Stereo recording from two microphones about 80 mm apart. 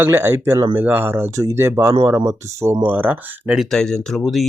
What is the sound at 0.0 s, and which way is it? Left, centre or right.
Speech, right.